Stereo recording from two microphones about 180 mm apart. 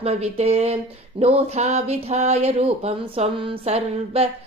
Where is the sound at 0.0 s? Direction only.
35° right (ahead or behind).